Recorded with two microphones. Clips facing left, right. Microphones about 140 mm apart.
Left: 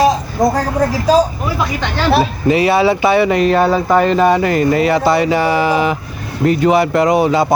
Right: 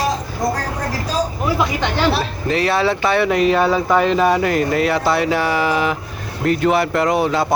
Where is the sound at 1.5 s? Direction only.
15° right (ahead or behind).